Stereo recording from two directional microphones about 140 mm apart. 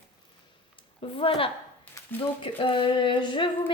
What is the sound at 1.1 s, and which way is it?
Speech, 40° left (ahead or behind).